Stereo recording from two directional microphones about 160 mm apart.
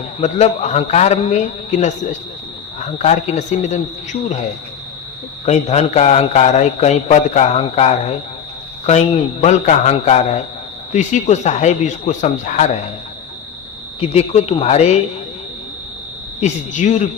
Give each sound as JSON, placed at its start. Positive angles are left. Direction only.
{"t": 0.2, "sound": "a man's voice", "side_deg": 45}
{"t": 3.0, "sound": "a man's voice", "side_deg": 45}
{"t": 5.5, "sound": "a man's voice", "side_deg": 45}
{"t": 14.0, "sound": "speech", "side_deg": 40}
{"t": 16.4, "sound": "a man's voice", "side_deg": 50}